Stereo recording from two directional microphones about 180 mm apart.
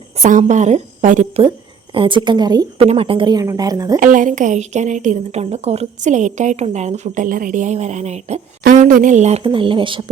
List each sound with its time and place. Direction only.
0.2 s a woman's voice: 45° right (ahead or behind)
1.4 s a woman's voice: 30° right (ahead or behind)
2.8 s speech: 35° right (ahead or behind)
3.9 s a woman's voice: 45° right (ahead or behind)
8.6 s a woman's voice: 50° right (ahead or behind); by 10.0 s 30° right (ahead or behind)